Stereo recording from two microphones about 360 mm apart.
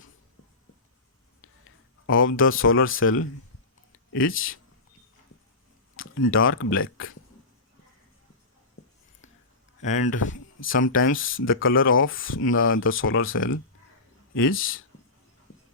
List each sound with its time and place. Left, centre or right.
2.0 s speech: left
6.0 s speech: left
9.8 s speech: centre
10.1 s speech: left